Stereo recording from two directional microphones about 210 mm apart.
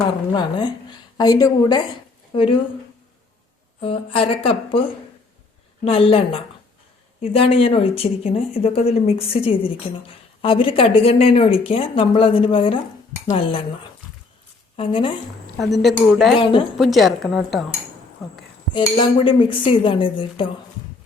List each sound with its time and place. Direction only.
0.3 s speech: 20° left (ahead or behind)
3.8 s speech: 25° left (ahead or behind)
5.8 s speech: 25° left (ahead or behind)
14.8 s speech: 25° left (ahead or behind)
15.5 s speech: centre (ahead or behind)
16.4 s speech: 25° left (ahead or behind)
16.7 s speech: centre (ahead or behind)
18.7 s speech: 25° left (ahead or behind)